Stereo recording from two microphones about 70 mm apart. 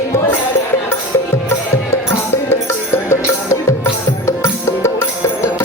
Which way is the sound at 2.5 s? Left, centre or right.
Left.